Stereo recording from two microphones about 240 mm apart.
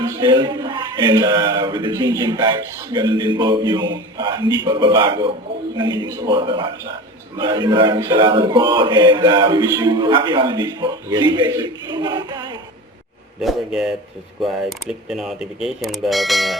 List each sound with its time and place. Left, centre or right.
0.0 s a man's voice: centre
13.4 s speech: centre